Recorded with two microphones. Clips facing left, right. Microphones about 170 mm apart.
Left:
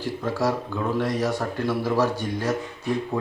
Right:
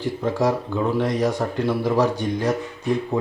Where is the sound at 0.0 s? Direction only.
15° right (ahead or behind).